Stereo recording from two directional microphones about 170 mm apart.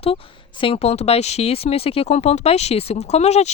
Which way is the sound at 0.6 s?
35° left (ahead or behind).